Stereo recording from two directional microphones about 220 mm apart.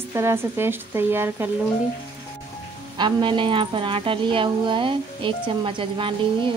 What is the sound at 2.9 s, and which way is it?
A woman's voice, 20° right (ahead or behind).